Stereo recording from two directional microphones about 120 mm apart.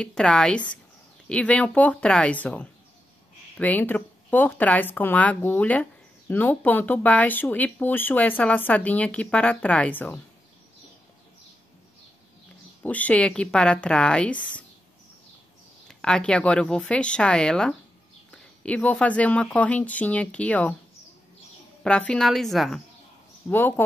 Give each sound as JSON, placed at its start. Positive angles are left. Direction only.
{"t": 0.0, "sound": "speech", "side_deg": 5}
{"t": 12.8, "sound": "speech", "side_deg": 10}
{"t": 15.9, "sound": "speech", "side_deg": 5}
{"t": 21.8, "sound": "a woman's voice", "side_deg": 10}
{"t": 23.5, "sound": "speech", "side_deg": 25}